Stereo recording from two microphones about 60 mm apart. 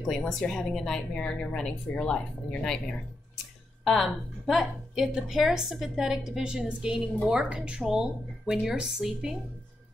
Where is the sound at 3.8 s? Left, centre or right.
Centre.